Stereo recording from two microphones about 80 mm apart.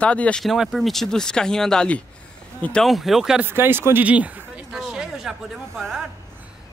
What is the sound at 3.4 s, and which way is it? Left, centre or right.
Speech, right.